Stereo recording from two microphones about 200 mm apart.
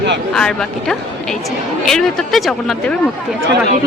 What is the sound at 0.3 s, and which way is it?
Speech, 5° left (ahead or behind).